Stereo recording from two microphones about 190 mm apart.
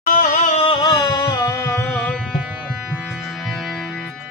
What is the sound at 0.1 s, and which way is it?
Music, 45° left (ahead or behind).